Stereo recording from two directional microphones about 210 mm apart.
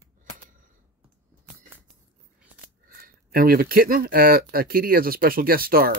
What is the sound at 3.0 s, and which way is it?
Speech, 45° right (ahead or behind).